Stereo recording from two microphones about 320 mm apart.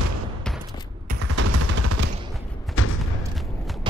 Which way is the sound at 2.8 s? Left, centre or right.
Left.